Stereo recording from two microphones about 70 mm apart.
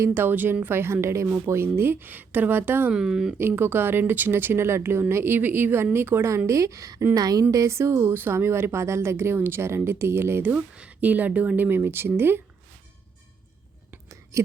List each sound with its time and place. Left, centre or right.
0.0 s speech: right
2.9 s speech: centre
3.3 s a woman's voice: right
7.5 s speech: right
10.8 s speech: right
14.3 s a woman's voice: right